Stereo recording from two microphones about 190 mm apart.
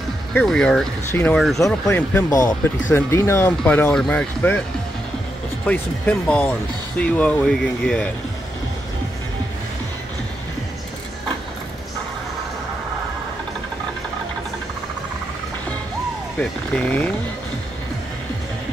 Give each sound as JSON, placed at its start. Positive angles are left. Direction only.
{"t": 0.3, "sound": "speech", "side_deg": 5}
{"t": 5.7, "sound": "speech", "side_deg": 5}
{"t": 16.3, "sound": "speech", "side_deg": 5}